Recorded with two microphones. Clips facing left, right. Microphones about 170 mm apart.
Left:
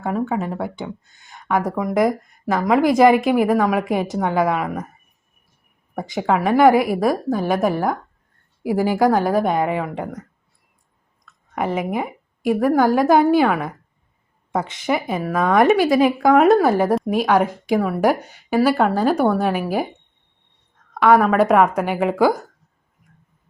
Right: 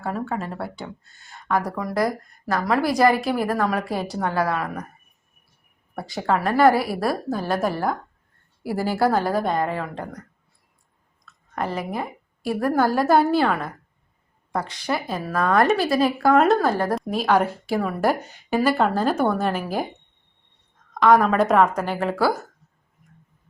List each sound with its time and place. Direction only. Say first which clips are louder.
0.0 s speech: left 5 dB; 15° left (ahead or behind)
5.9 s speech: left 3 dB; 15° left (ahead or behind)
11.3 s a woman's voice: left 4 dB; 15° left (ahead or behind)
20.9 s speech: left 2 dB; 10° left (ahead or behind)